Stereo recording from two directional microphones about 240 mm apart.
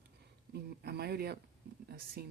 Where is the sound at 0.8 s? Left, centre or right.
Right.